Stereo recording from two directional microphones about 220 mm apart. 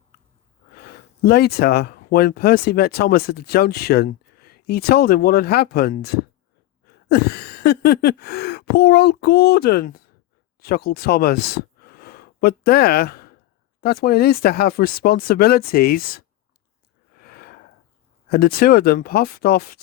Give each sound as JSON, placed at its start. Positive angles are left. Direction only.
{"t": 1.2, "sound": "speech", "side_deg": 45}
{"t": 17.2, "sound": "a sound", "side_deg": 45}
{"t": 18.3, "sound": "speech", "side_deg": 45}